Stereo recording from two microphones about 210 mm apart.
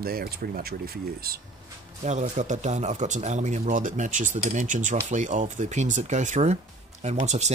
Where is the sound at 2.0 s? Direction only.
35° right (ahead or behind).